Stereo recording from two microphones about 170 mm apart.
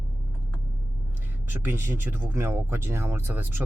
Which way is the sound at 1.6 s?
10° right (ahead or behind).